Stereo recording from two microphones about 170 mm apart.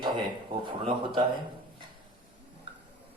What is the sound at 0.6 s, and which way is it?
Speech, 35° right (ahead or behind).